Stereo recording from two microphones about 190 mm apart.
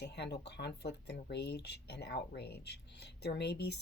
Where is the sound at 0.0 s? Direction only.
60° left (ahead or behind).